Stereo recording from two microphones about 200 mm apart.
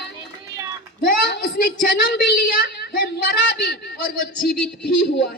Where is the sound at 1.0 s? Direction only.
45° left (ahead or behind).